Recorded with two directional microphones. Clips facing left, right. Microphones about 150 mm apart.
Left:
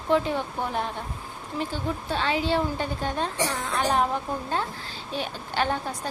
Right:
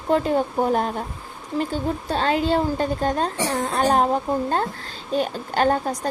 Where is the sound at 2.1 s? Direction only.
40° right (ahead or behind).